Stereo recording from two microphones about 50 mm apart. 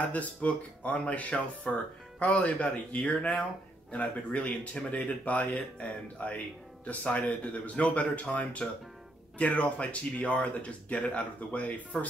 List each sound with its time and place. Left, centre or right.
0.1 s speech: left